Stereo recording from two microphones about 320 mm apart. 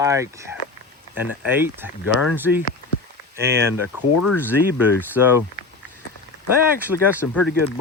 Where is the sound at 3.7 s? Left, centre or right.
Left.